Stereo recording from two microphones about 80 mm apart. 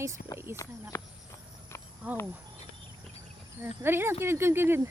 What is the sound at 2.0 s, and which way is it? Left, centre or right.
Speech, centre.